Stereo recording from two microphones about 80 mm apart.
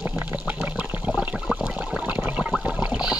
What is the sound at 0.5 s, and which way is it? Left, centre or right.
Water, centre.